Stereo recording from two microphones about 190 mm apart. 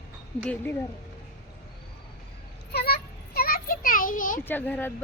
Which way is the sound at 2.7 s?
55° left (ahead or behind).